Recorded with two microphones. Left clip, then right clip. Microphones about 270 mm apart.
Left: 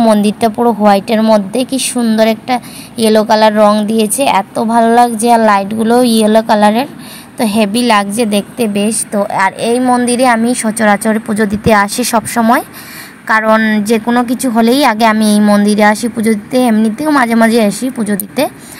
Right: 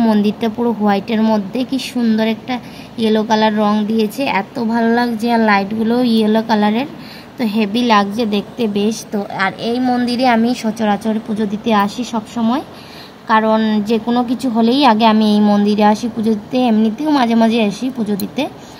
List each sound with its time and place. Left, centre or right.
0.0 s a woman's voice: left
13.3 s a woman's voice: centre